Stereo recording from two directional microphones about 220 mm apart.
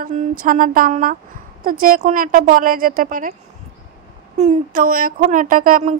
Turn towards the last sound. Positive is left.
turn(degrees=-40)  # may be behind; listen again after turning